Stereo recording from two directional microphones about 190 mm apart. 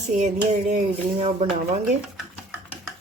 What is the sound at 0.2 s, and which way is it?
Speech, 40° right (ahead or behind).